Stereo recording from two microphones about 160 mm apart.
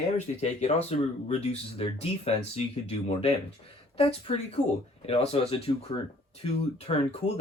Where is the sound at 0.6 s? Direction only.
40° left (ahead or behind).